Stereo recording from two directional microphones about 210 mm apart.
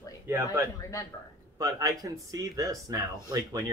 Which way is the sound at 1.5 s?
15° right (ahead or behind).